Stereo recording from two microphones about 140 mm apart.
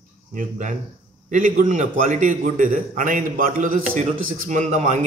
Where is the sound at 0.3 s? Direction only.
70° right (ahead or behind).